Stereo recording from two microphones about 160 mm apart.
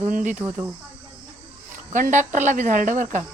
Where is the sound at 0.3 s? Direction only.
10° right (ahead or behind).